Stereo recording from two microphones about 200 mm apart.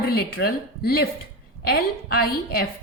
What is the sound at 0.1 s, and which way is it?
A woman's voice, 50° left (ahead or behind).